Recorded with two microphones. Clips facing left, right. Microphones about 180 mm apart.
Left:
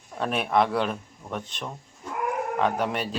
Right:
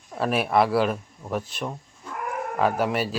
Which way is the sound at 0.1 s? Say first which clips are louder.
Right 2 dB; 5° right (ahead or behind).